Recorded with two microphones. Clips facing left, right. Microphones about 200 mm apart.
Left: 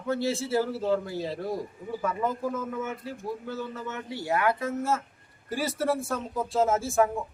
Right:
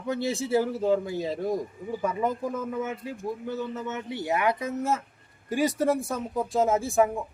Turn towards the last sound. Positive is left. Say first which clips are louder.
# right 1 dB
turn(degrees=-15)  # may be behind; listen again after turning